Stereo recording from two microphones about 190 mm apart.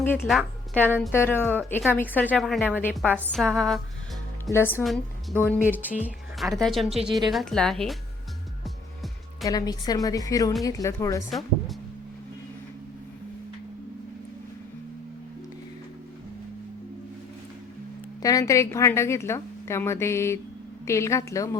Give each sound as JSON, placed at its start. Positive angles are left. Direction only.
{"t": 0.3, "sound": "a woman's voice", "side_deg": 0}
{"t": 1.1, "sound": "a woman's voice", "side_deg": 10}
{"t": 5.6, "sound": "speech", "side_deg": -10}
{"t": 9.5, "sound": "a woman's voice", "side_deg": 20}
{"t": 11.3, "sound": "music", "side_deg": 0}
{"t": 18.2, "sound": "a woman's voice", "side_deg": 20}